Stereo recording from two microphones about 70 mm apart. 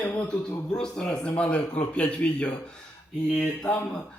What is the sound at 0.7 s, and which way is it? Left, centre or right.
A man's voice, centre.